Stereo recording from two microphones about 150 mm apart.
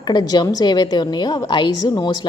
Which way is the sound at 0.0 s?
30° left (ahead or behind).